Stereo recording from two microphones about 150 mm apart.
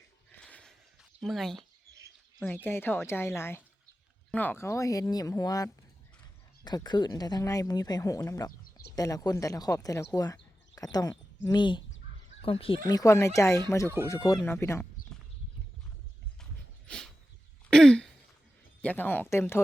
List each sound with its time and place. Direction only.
0.3 s a sound: 10° left (ahead or behind)
1.2 s speech: centre (ahead or behind)
2.6 s speech: 15° left (ahead or behind); by 12.8 s 35° left (ahead or behind)
12.9 s speech: 20° left (ahead or behind)
16.4 s dog: 5° left (ahead or behind)
17.7 s throat clearing: 5° left (ahead or behind)
18.8 s speech: 10° left (ahead or behind)